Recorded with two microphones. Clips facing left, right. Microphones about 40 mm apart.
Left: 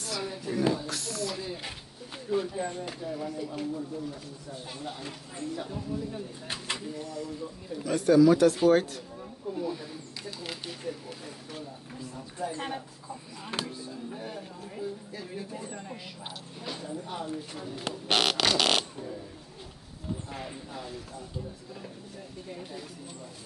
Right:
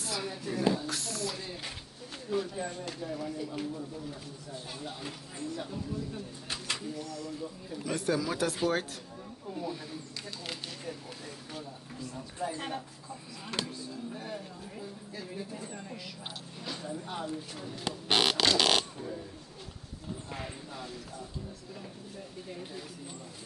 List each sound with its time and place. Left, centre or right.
0.0 s speech: centre
5.6 s speech: centre
7.8 s speech: centre
12.4 s speech: centre
20.3 s speech: centre
22.5 s speech: centre